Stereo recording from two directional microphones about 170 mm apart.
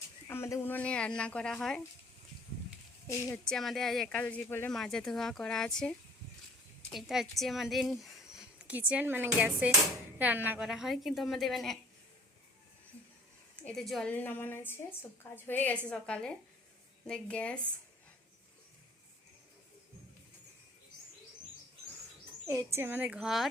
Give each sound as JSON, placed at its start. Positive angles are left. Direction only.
{"t": 0.3, "sound": "speech", "side_deg": 15}
{"t": 3.1, "sound": "a woman's voice", "side_deg": 20}
{"t": 3.5, "sound": "a woman's voice", "side_deg": 0}
{"t": 6.9, "sound": "a woman's voice", "side_deg": 0}
{"t": 13.6, "sound": "a woman's voice", "side_deg": 5}
{"t": 22.4, "sound": "a woman's voice", "side_deg": -15}